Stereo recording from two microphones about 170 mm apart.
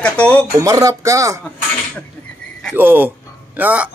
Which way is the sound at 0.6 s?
20° right (ahead or behind).